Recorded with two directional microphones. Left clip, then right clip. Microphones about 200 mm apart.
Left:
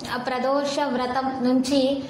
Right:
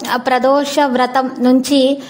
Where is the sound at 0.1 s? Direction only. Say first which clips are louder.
Right 11 dB; 50° right (ahead or behind).